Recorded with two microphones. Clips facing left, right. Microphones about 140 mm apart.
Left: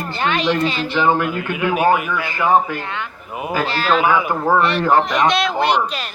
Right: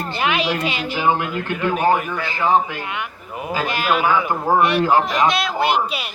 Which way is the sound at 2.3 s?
50° left (ahead or behind).